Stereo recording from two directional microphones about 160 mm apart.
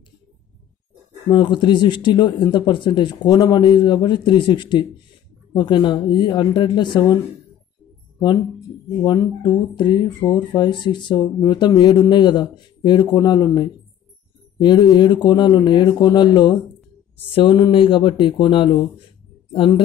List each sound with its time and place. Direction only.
1.3 s speech: 30° left (ahead or behind)
8.2 s speech: 25° left (ahead or behind)